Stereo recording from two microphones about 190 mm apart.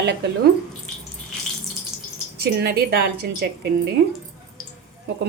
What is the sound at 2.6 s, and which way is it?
Speech, 55° right (ahead or behind).